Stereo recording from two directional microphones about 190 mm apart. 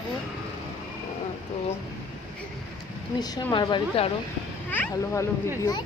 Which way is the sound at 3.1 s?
20° left (ahead or behind).